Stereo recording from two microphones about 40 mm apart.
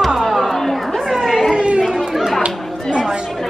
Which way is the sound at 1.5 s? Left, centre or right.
Right.